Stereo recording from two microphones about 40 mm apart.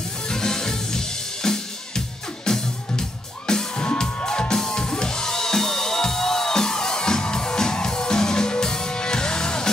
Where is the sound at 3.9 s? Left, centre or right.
Centre.